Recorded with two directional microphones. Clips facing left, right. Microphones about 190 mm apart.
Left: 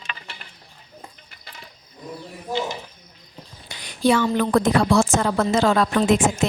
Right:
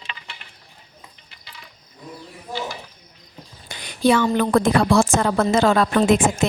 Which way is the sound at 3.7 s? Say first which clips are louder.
Right 1 dB; 60° right (ahead or behind).